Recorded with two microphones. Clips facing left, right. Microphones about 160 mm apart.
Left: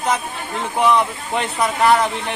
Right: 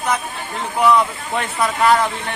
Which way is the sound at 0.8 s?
20° left (ahead or behind).